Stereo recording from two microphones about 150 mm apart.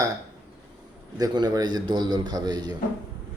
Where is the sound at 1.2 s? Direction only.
25° right (ahead or behind).